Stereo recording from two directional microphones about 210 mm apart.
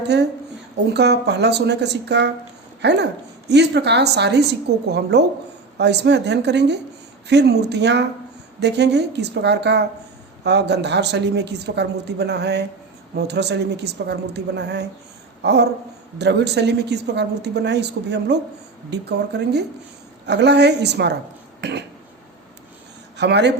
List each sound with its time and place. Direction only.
0.1 s a woman's voice: 55° right (ahead or behind)
21.6 s a sound: 55° right (ahead or behind)
23.1 s speech: 55° right (ahead or behind)